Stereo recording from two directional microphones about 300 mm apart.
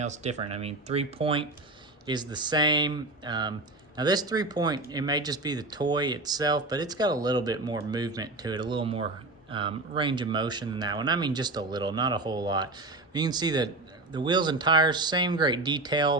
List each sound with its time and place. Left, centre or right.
0.0 s speech: right